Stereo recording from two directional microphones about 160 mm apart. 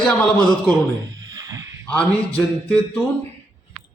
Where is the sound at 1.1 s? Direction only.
20° right (ahead or behind).